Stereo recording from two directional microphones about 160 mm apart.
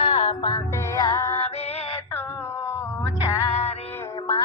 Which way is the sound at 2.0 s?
15° left (ahead or behind).